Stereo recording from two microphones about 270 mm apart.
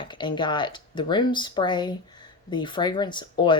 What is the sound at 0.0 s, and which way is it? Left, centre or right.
A woman's voice, centre.